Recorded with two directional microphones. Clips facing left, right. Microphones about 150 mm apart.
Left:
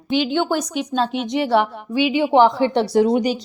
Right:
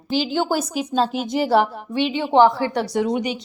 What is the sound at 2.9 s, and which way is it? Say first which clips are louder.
Speech: left 5 dB; 35° left (ahead or behind).